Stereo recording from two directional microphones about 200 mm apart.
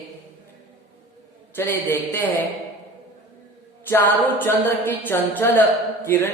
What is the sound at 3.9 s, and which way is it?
A woman's voice, 10° left (ahead or behind).